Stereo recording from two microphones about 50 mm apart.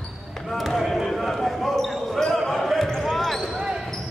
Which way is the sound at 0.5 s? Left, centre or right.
Centre.